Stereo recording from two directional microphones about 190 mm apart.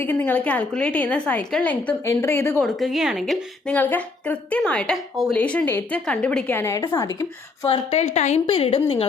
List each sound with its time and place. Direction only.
0.0 s a woman's voice: 10° left (ahead or behind)
2.6 s a woman's voice: centre (ahead or behind); by 7.8 s 20° left (ahead or behind)
7.9 s a woman's voice: 35° left (ahead or behind)